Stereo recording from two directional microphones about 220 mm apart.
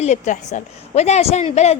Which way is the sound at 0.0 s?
30° left (ahead or behind).